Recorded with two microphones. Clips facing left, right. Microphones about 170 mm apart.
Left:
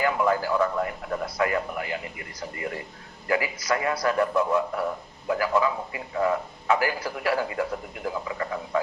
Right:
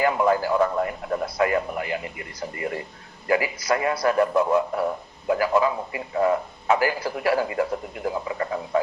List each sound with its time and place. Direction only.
0.0 s a man's voice: 25° right (ahead or behind)